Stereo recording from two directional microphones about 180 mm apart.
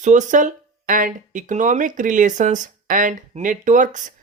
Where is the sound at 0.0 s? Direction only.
45° right (ahead or behind).